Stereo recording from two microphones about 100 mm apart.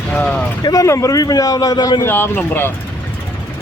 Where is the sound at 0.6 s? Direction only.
35° left (ahead or behind).